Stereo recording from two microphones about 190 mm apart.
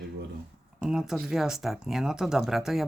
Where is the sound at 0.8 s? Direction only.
5° right (ahead or behind).